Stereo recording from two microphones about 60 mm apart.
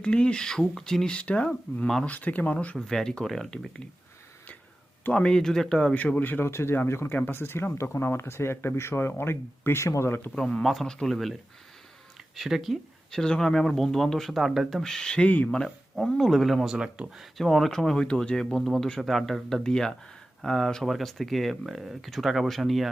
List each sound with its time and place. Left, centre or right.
0.0 s speech: centre
2.8 s speech: centre
5.1 s speech: centre
5.9 s speech: left
6.5 s speech: left
10.1 s speech: left
10.4 s speech: centre
12.4 s speech: centre
13.1 s speech: centre
16.0 s speech: centre
16.7 s speech: centre
17.3 s speech: centre